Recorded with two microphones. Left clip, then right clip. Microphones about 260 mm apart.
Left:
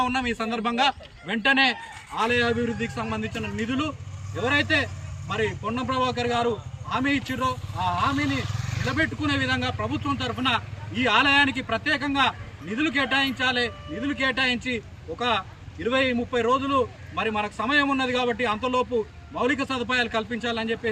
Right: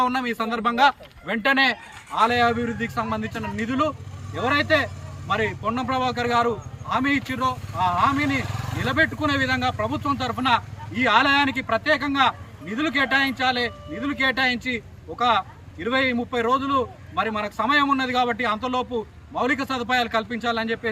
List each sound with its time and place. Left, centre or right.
0.0 s speech: centre
8.1 s speech: right
8.9 s speech: centre